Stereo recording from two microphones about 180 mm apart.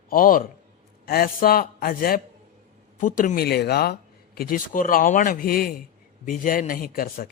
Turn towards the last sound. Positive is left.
turn(degrees=55)  # may be behind; listen again after turning